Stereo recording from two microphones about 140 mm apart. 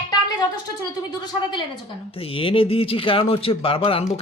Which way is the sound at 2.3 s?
40° left (ahead or behind).